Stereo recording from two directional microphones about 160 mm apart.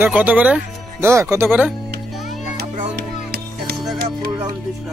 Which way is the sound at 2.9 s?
80° right.